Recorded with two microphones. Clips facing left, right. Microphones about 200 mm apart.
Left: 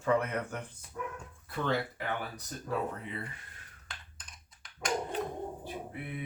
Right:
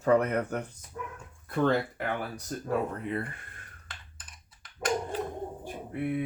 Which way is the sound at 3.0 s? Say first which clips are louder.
Right 8 dB; 55° right (ahead or behind).